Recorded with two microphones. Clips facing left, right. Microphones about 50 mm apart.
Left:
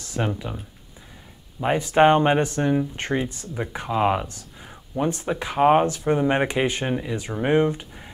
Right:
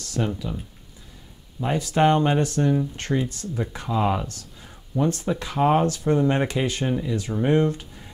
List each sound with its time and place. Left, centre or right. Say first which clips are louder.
0.0 s speech: even; left
1.6 s speech: left 3 dB; left